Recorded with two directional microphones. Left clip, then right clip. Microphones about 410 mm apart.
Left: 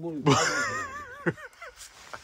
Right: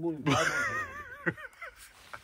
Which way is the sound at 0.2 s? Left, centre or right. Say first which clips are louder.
Left 5 dB; centre.